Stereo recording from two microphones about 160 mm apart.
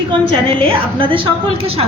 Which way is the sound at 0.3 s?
35° right (ahead or behind).